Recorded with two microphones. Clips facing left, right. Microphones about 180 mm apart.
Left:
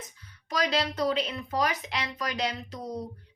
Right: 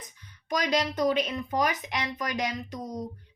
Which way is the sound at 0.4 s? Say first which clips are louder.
Right 1 dB; 15° right (ahead or behind).